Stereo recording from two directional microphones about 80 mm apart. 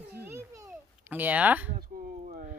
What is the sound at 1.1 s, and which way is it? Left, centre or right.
Speech, right.